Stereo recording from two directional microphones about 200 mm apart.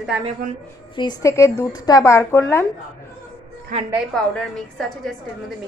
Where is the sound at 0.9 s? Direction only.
20° left (ahead or behind).